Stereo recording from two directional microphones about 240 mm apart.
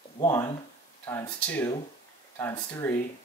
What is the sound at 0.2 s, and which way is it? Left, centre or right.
Speech, centre.